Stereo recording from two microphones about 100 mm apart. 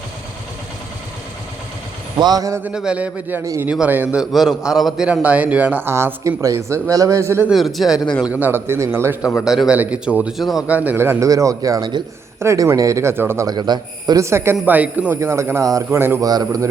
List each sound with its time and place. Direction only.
2.1 s speech: 45° right (ahead or behind)
2.6 s a man's voice: 10° right (ahead or behind)
4.1 s a man's voice: 5° right (ahead or behind); by 7.4 s 30° right (ahead or behind)
7.5 s a man's voice: centre (ahead or behind)
8.3 s speech: 20° right (ahead or behind)
9.4 s a man's voice: 5° right (ahead or behind)
10.8 s speech: 20° right (ahead or behind)
11.3 s speech: 35° right (ahead or behind)
13.5 s a man's voice: 45° right (ahead or behind)
14.2 s a man's voice: 25° right (ahead or behind)
15.2 s speech: 25° right (ahead or behind)
16.2 s speech: 40° right (ahead or behind)